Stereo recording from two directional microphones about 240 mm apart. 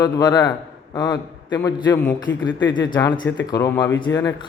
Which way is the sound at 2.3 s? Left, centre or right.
Left.